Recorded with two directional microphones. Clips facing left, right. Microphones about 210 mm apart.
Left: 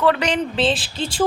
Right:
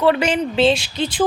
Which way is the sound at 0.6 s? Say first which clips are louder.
Right 4 dB; 30° left (ahead or behind).